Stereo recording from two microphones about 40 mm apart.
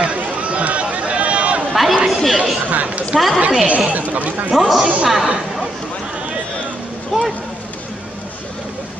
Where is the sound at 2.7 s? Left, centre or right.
Right.